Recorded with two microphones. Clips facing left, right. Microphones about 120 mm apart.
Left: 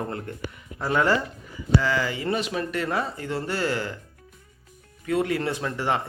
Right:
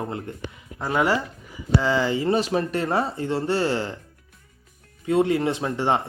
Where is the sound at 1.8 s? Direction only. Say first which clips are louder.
Right 4 dB; 25° right (ahead or behind).